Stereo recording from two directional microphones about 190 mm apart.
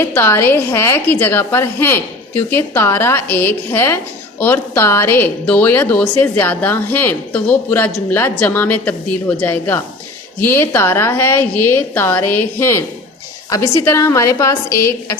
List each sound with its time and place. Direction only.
0.0 s a woman's voice: 10° left (ahead or behind)